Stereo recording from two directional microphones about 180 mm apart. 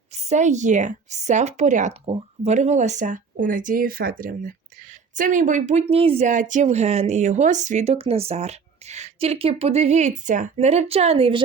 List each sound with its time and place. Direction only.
0.1 s a woman's voice: 40° right (ahead or behind)